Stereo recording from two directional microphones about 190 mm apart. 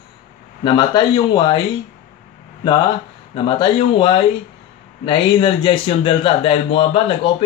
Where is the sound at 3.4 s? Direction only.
25° left (ahead or behind).